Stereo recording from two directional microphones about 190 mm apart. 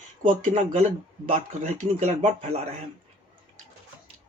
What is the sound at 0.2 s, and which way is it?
Speech, 35° right (ahead or behind).